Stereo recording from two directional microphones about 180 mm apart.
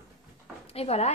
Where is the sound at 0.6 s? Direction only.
35° left (ahead or behind).